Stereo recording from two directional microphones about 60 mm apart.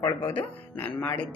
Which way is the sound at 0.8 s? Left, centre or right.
Left.